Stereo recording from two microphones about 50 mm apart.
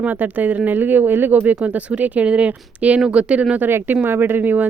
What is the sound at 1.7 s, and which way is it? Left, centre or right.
Speech, right.